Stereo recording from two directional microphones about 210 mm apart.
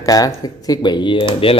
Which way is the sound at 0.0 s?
15° left (ahead or behind).